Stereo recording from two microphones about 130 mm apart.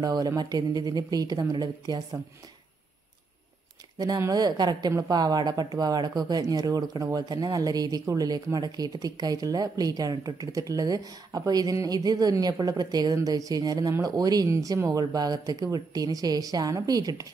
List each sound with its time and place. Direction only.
0.0 s speech: 30° right (ahead or behind)
4.2 s speech: 30° right (ahead or behind)